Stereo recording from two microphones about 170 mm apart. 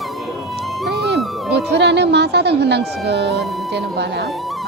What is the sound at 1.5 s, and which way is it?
Speech, 80° right.